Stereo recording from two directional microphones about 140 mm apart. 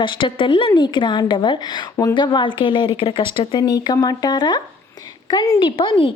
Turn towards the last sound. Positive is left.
turn(degrees=40)  # may be behind; listen again after turning